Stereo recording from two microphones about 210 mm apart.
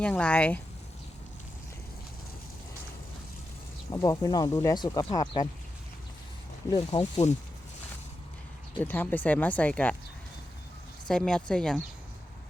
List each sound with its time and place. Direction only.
0.0 s a woman's voice: 5° left (ahead or behind)
3.9 s speech: 15° left (ahead or behind)
6.7 s speech: 20° left (ahead or behind)
8.8 s speech: 10° left (ahead or behind)
11.1 s a woman's voice: 5° left (ahead or behind)